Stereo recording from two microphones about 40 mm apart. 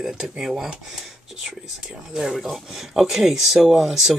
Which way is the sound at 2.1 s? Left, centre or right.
Centre.